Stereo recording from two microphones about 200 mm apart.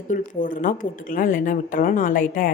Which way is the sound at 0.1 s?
40° left (ahead or behind).